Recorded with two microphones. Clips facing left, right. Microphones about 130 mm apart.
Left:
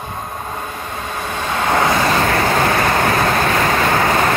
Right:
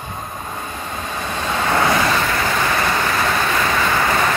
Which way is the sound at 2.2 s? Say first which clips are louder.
Left 4 dB; 40° left (ahead or behind).